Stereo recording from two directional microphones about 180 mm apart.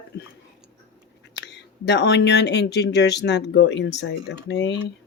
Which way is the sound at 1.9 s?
70° left (ahead or behind).